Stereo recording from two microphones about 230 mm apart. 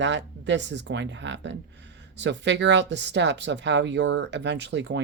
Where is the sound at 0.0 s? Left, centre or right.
Right.